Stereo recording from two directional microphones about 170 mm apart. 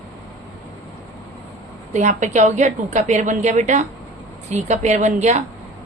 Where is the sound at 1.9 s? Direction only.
45° right (ahead or behind).